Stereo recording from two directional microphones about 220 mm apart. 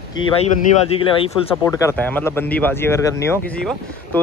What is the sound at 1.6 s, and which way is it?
Speech, 10° left (ahead or behind).